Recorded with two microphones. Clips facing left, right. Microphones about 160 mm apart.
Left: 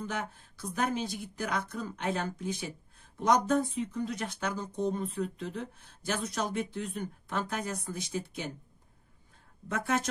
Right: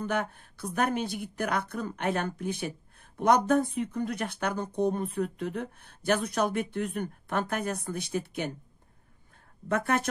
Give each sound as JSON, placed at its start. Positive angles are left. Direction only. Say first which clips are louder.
{"t": 0.0, "sound": "speech", "louder": "right 6 dB", "side_deg": -60}
{"t": 9.7, "sound": "speech", "louder": "right 4 dB", "side_deg": -60}